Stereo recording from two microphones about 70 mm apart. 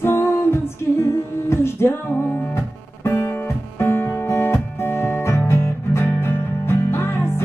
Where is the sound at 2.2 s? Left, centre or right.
Left.